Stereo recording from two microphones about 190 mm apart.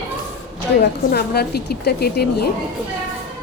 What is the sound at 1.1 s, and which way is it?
A woman's voice, 55° left (ahead or behind).